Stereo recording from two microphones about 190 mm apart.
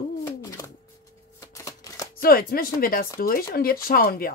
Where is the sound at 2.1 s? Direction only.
50° left (ahead or behind).